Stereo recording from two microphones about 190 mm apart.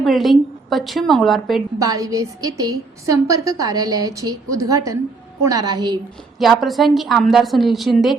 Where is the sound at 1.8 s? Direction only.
20° right (ahead or behind).